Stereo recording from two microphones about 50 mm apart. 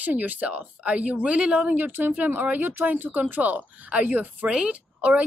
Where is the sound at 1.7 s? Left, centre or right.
Right.